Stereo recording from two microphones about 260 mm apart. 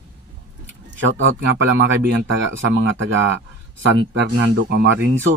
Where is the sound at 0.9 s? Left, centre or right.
Right.